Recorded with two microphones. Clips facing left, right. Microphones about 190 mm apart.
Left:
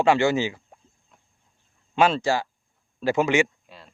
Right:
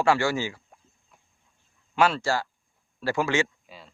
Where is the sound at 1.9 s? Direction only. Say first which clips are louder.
Left 3 dB; 20° left (ahead or behind).